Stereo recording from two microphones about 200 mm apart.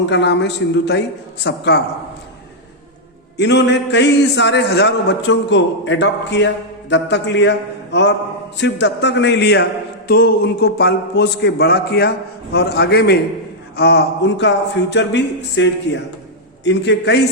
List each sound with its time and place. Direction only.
0.0 s a man's voice: 60° left (ahead or behind)
3.3 s a man's voice: 60° left (ahead or behind)